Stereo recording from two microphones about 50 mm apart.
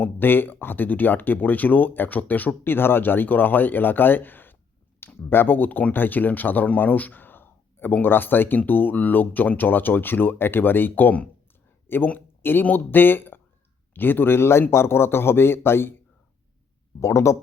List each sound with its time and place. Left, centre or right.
0.0 s speech: left
2.7 s speech: left
17.0 s speech: left